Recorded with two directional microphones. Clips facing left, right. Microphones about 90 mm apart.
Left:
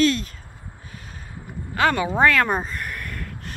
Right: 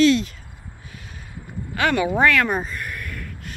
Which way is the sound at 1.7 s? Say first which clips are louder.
Even; 30° left (ahead or behind).